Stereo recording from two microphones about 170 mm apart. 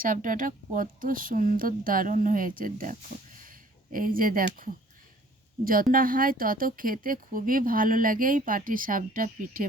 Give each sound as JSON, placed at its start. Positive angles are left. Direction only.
{"t": 0.0, "sound": "a woman's voice", "side_deg": -50}
{"t": 5.9, "sound": "speech", "side_deg": -55}